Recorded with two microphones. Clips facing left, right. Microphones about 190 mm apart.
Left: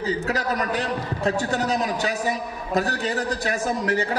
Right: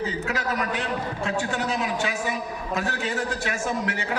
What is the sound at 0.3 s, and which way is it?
A man's voice, 40° left (ahead or behind).